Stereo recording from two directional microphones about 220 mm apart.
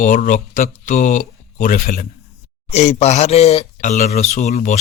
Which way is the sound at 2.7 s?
30° left (ahead or behind).